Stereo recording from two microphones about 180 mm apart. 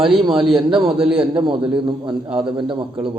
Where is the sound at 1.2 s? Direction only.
25° right (ahead or behind).